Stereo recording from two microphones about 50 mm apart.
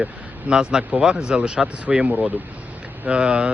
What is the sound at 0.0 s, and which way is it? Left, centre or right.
Speech, centre.